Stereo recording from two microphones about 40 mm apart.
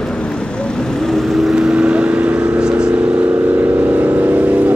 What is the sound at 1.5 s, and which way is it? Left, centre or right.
Vehicle, right.